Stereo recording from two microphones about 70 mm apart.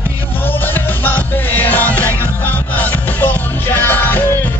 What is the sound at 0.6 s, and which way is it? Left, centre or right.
Music, left.